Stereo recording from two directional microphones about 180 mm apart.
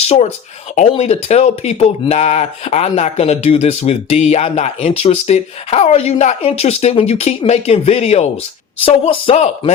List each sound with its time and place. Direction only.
0.8 s speech: 35° left (ahead or behind)